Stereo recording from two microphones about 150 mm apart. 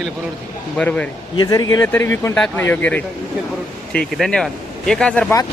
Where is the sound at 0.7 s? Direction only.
10° left (ahead or behind).